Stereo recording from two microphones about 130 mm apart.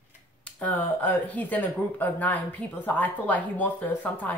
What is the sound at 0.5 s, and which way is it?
Speech, 10° left (ahead or behind).